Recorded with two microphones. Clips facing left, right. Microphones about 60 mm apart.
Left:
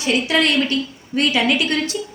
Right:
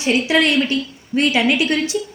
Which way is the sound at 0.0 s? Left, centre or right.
Centre.